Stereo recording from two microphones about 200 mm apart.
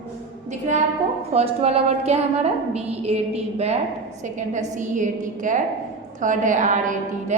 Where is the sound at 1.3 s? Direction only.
30° right (ahead or behind).